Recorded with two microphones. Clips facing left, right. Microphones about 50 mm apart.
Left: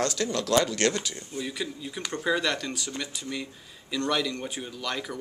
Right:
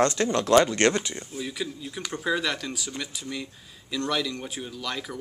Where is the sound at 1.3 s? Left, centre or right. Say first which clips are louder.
Even; centre.